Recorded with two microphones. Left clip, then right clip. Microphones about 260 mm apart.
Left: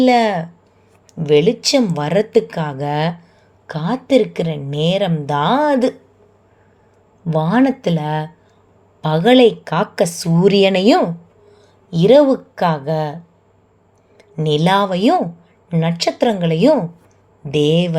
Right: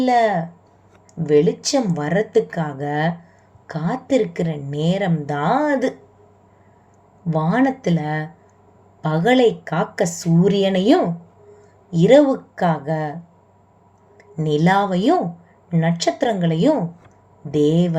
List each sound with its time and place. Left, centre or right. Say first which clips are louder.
0.0 s a woman's voice: left 3 dB; left
7.3 s a woman's voice: left 3 dB; centre
14.4 s a woman's voice: left 3 dB; left